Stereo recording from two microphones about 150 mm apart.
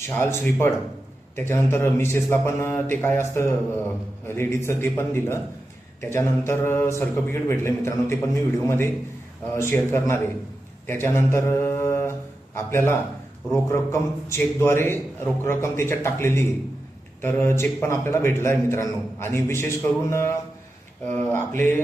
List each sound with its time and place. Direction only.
0.1 s a man's voice: 15° left (ahead or behind)